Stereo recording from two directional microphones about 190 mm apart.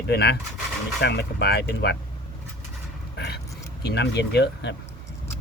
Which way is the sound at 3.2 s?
60° left (ahead or behind).